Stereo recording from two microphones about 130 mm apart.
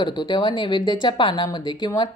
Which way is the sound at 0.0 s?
35° left (ahead or behind).